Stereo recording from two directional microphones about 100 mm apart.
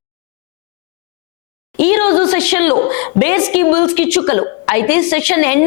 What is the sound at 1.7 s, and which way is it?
A woman's voice, 20° left (ahead or behind).